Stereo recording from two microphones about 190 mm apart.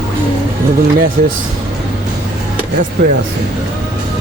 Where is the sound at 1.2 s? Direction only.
50° right (ahead or behind).